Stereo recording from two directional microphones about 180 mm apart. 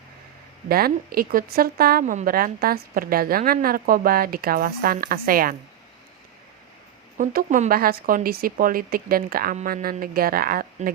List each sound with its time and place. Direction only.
0.7 s speech: 55° right (ahead or behind)
7.2 s speech: 45° right (ahead or behind)